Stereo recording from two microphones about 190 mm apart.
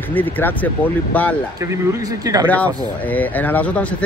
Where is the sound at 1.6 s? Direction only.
15° right (ahead or behind).